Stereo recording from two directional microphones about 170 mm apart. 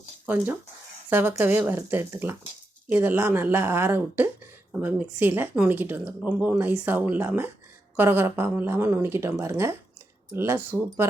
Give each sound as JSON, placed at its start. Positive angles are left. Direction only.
{"t": 1.1, "sound": "speech", "side_deg": -10}